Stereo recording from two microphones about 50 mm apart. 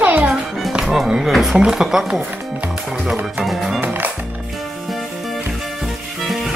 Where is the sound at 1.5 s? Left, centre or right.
Centre.